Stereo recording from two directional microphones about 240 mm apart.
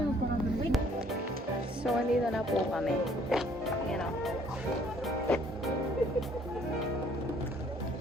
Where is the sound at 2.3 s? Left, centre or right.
Centre.